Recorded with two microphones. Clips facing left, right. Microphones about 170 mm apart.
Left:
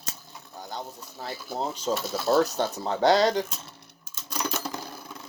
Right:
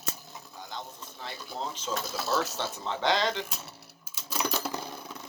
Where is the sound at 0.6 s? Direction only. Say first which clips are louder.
Left 5 dB; 40° left (ahead or behind).